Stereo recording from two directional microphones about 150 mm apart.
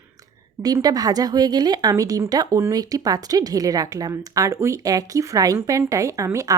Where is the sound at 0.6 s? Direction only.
25° right (ahead or behind).